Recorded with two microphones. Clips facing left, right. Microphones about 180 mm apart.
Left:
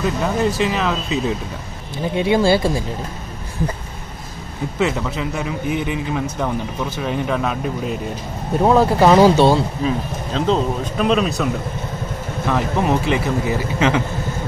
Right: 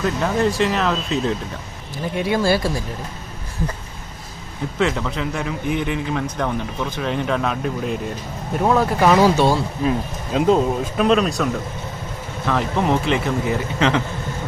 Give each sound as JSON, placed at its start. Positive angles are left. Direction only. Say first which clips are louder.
{"t": 0.0, "sound": "speech", "louder": "even", "side_deg": 5}
{"t": 2.1, "sound": "speech", "louder": "left 3 dB", "side_deg": 25}
{"t": 4.7, "sound": "a man's voice", "louder": "left 1 dB", "side_deg": 10}
{"t": 8.6, "sound": "speech", "louder": "left 3 dB", "side_deg": 30}
{"t": 9.8, "sound": "speech", "louder": "even", "side_deg": -10}
{"t": 12.4, "sound": "a man's voice", "louder": "left 1 dB", "side_deg": 10}